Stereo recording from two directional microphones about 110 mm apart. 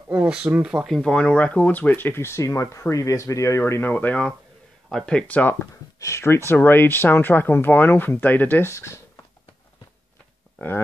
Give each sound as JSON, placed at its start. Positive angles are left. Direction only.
{"t": 0.1, "sound": "speech", "side_deg": -15}
{"t": 5.9, "sound": "speech", "side_deg": 25}